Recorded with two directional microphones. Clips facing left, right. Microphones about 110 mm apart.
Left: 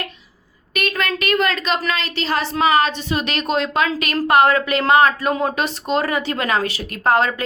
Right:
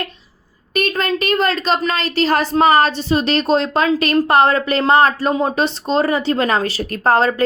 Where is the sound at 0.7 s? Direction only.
35° right (ahead or behind).